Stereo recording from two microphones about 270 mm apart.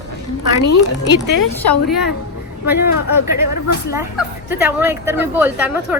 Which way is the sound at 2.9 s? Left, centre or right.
Left.